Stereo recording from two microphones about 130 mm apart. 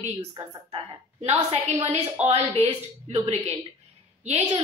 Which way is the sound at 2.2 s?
45° right (ahead or behind).